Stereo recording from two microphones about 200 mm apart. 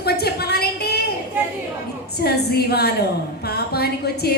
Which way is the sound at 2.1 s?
50° left (ahead or behind).